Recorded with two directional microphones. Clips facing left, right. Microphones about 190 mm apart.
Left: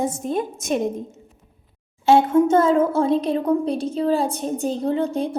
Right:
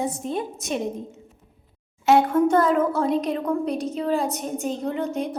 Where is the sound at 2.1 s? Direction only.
25° left (ahead or behind).